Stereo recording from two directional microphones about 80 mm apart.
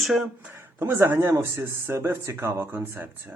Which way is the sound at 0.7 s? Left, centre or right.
Right.